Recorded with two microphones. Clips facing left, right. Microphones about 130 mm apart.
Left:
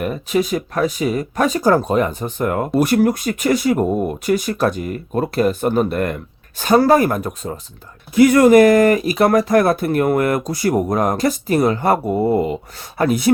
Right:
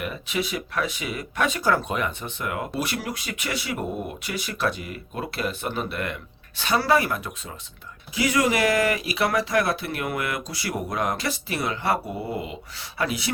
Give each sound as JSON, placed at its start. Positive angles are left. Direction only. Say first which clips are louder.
{"t": 0.0, "sound": "speech", "louder": "left 9 dB", "side_deg": 40}